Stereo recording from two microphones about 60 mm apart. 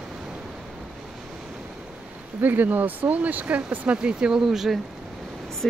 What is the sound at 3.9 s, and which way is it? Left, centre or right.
Speech, centre.